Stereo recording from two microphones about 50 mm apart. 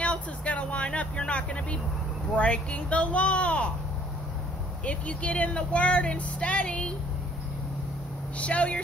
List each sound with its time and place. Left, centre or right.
0.0 s vehicle: left
2.3 s speech: left
4.8 s speech: left
8.4 s speech: left